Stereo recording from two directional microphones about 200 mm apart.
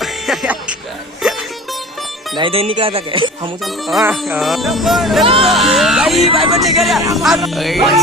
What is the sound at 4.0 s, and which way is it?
Music, 5° right (ahead or behind).